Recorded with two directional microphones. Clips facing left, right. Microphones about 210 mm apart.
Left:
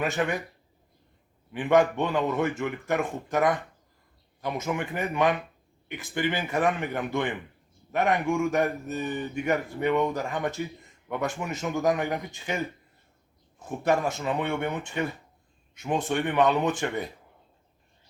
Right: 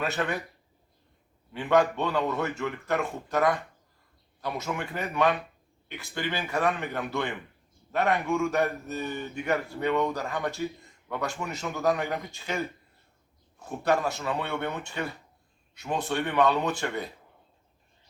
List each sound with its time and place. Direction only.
0.0 s a man's voice: 15° left (ahead or behind)
1.5 s a man's voice: 20° left (ahead or behind)
13.7 s a man's voice: 20° left (ahead or behind)